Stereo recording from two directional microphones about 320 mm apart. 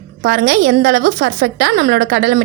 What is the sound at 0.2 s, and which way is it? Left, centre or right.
A woman's voice, right.